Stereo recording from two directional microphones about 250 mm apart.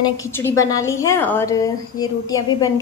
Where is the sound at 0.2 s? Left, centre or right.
Centre.